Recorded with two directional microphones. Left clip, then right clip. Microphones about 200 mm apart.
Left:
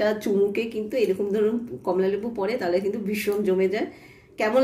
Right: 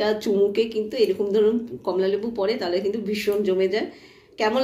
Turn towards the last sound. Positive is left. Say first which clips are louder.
# left 1 dB
turn(degrees=45)  # may be behind; listen again after turning